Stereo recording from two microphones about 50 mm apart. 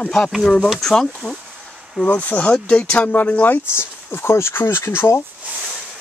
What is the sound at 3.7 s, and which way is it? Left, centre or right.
Speech, left.